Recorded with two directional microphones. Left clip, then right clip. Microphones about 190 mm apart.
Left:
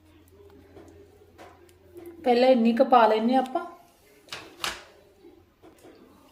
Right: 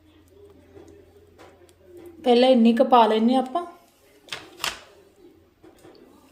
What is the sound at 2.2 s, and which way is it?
Speech, 20° right (ahead or behind).